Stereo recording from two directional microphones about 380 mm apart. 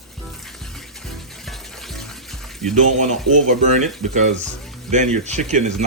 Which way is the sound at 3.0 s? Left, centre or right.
Centre.